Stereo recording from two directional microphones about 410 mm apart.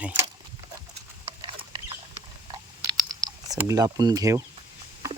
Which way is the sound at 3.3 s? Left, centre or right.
Centre.